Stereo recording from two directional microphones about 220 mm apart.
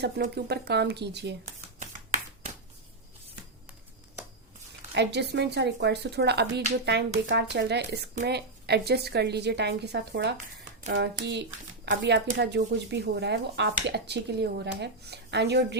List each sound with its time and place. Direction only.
0.0 s speech: 45° right (ahead or behind)
1.5 s a sound: 30° right (ahead or behind)
4.9 s speech: 50° right (ahead or behind)